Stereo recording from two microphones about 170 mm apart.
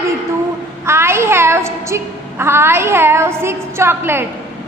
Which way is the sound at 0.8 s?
15° right (ahead or behind).